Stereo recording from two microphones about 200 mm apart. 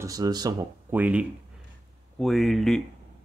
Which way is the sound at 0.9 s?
5° right (ahead or behind).